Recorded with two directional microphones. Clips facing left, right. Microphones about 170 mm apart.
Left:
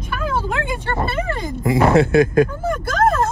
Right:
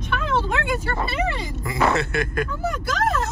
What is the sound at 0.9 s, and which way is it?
Speech, 50° left (ahead or behind).